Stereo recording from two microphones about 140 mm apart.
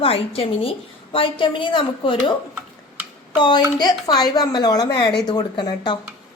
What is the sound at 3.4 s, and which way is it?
A woman's voice, 30° left (ahead or behind).